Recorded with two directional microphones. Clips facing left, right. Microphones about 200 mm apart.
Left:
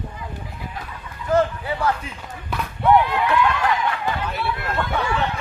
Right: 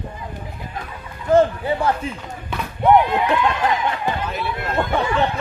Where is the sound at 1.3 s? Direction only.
25° right (ahead or behind).